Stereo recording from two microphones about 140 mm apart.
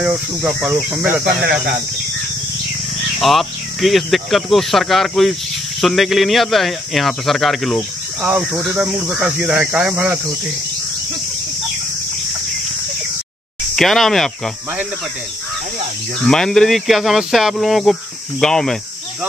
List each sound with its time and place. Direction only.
0.0 s speech: 5° right (ahead or behind)
1.2 s speech: 90° right
3.2 s speech: centre (ahead or behind)
13.7 s speech: centre (ahead or behind)
16.3 s speech: 5° left (ahead or behind)